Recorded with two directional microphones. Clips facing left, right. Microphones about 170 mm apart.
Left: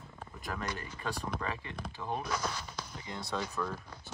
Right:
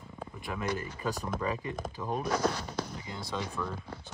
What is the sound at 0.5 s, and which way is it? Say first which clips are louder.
Speech: right 2 dB; 10° right (ahead or behind).